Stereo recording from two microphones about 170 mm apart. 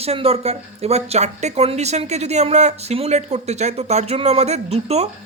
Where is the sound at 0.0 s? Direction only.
35° right (ahead or behind).